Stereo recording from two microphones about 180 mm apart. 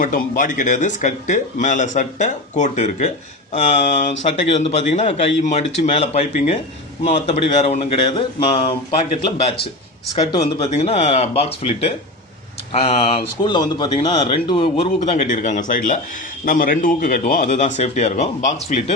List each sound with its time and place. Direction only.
0.0 s speech: 45° left (ahead or behind)